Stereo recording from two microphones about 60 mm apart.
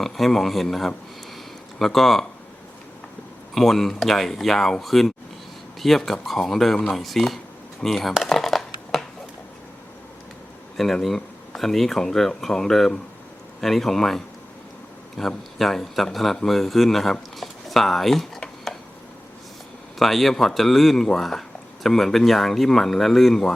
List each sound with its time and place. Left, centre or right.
0.0 s speech: centre
3.5 s speech: centre
8.2 s crushing: centre
10.8 s speech: centre
15.2 s a man's voice: centre
20.0 s speech: centre